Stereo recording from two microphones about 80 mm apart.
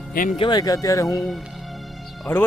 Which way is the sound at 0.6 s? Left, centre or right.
Left.